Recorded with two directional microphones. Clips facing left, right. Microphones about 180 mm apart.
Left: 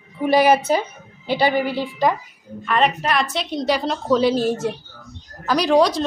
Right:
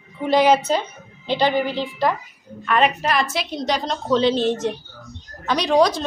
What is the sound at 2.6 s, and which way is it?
A woman's voice, centre (ahead or behind).